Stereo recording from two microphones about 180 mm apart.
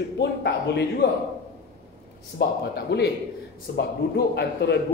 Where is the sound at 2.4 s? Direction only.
65° left (ahead or behind).